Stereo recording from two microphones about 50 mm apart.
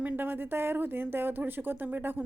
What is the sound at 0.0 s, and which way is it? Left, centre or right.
Speech, right.